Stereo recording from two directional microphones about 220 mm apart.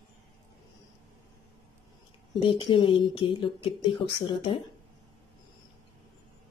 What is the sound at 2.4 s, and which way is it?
A woman's voice, 20° left (ahead or behind).